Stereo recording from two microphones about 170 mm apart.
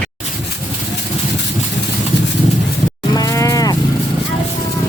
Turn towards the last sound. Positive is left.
turn(degrees=20)  # may be behind; listen again after turning